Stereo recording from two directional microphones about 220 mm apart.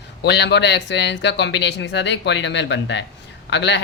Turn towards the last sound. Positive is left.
turn(degrees=50)  # may be behind; listen again after turning